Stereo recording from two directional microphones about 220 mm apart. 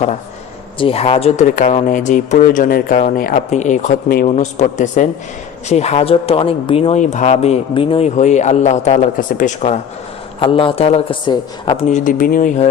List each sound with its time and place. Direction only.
0.8 s a woman's voice: 25° left (ahead or behind)